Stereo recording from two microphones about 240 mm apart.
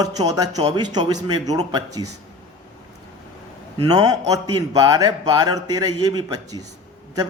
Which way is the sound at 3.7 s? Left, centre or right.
Centre.